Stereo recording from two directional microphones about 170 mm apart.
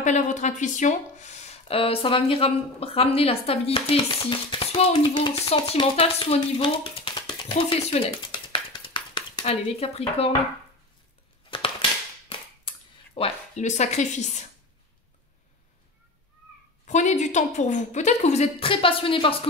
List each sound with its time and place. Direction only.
0.0 s speech: 45° left (ahead or behind)
12.3 s a sound: 35° left (ahead or behind)
16.8 s a woman's voice: 45° left (ahead or behind)